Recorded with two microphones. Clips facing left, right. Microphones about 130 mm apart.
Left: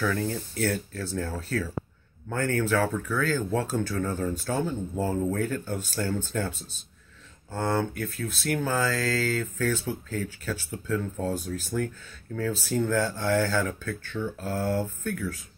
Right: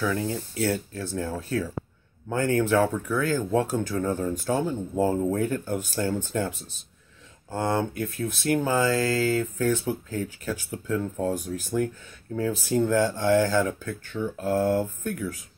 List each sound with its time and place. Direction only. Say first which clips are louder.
0.0 s speech: right 1 dB; 10° right (ahead or behind)
7.5 s speech: right 2 dB; 15° right (ahead or behind)